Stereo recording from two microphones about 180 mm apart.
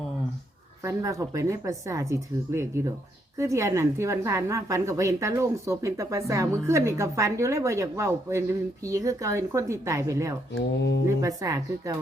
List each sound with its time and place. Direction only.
0.9 s a woman's voice: 15° right (ahead or behind)
10.5 s speech: 65° left (ahead or behind)
11.2 s speech: 20° right (ahead or behind)